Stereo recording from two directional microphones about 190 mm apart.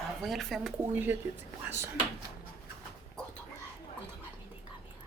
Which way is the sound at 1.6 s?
10° right (ahead or behind).